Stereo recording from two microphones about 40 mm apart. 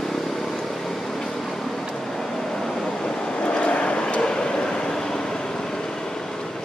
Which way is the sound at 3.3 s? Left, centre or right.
Left.